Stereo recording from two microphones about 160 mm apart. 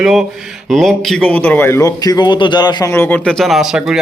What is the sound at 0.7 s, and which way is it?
Speech, centre (ahead or behind).